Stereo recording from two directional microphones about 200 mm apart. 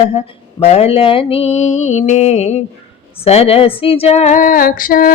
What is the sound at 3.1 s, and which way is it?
Speech, 30° left (ahead or behind).